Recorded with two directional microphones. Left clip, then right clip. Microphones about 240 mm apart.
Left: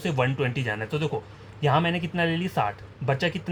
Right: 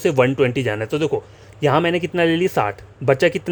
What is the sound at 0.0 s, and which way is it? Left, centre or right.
Speech, right.